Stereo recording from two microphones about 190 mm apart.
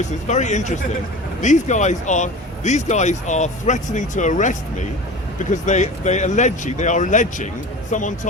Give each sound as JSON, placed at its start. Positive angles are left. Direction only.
{"t": 0.3, "sound": "speech", "side_deg": 40}